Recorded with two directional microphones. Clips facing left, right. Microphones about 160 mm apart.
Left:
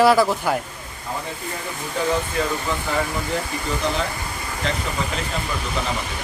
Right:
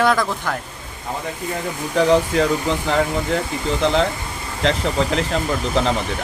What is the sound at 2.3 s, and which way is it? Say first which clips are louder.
Speech: right 6 dB; 90° right.